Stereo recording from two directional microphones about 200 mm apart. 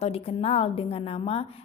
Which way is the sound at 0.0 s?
30° left (ahead or behind).